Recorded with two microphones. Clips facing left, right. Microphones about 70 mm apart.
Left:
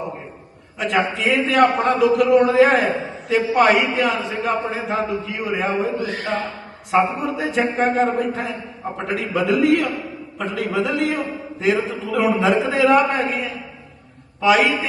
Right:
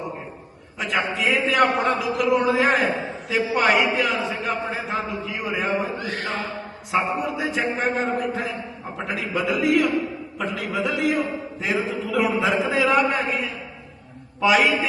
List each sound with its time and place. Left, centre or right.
0.8 s a man's voice: centre
6.0 s a man's voice: right
6.9 s a man's voice: centre